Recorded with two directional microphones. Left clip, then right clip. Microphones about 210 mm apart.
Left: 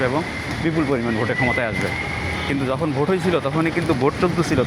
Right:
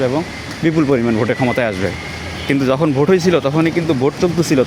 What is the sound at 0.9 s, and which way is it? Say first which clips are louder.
Speech: right 5 dB; 55° right (ahead or behind).